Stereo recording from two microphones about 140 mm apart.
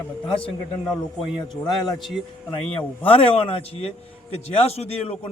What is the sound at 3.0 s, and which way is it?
A man's voice, 40° left (ahead or behind).